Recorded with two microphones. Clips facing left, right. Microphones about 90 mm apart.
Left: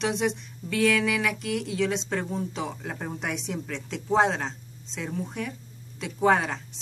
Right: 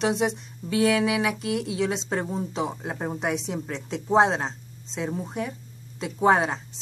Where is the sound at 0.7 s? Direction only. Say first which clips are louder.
Right 2 dB; 15° right (ahead or behind).